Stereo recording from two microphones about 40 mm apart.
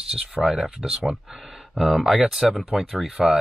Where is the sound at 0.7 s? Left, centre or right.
Centre.